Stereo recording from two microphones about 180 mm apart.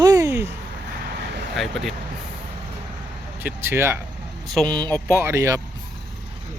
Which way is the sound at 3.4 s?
10° right (ahead or behind).